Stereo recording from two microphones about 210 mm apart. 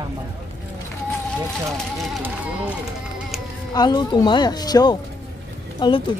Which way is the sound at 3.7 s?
20° left (ahead or behind).